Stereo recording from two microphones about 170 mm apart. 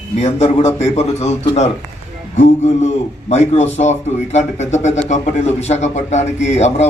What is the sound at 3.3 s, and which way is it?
A man's voice, 40° left (ahead or behind).